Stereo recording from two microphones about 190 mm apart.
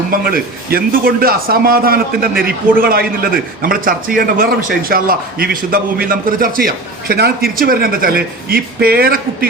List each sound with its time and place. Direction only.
0.1 s a man's voice: 50° right (ahead or behind)